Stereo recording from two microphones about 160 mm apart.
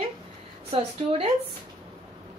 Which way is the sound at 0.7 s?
35° right (ahead or behind).